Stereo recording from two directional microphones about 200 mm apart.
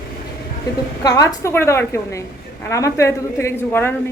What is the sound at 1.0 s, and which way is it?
A woman's voice, 15° left (ahead or behind).